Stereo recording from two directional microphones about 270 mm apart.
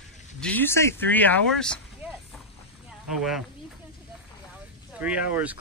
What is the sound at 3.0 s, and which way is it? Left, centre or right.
Speech, centre.